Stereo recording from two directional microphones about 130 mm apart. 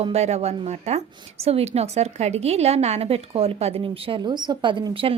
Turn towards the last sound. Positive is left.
turn(degrees=-40)  # may be behind; listen again after turning